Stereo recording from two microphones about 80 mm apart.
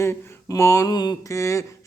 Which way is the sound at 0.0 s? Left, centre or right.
Left.